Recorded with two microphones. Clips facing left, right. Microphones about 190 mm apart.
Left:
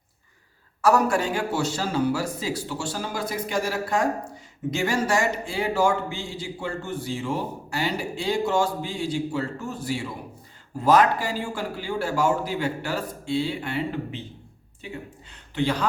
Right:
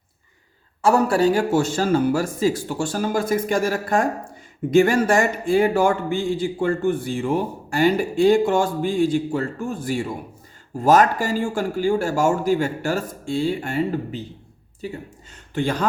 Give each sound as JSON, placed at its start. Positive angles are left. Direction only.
{"t": 0.8, "sound": "a man's voice", "side_deg": -30}